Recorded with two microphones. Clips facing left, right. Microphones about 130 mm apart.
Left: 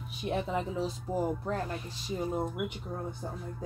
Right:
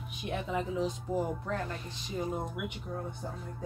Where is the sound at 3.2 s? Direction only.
30° left (ahead or behind).